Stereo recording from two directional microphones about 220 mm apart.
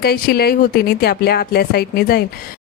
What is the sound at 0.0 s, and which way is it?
A woman's voice, 45° left (ahead or behind).